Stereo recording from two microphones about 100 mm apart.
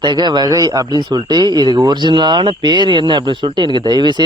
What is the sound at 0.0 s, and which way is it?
A man's voice, 50° right (ahead or behind).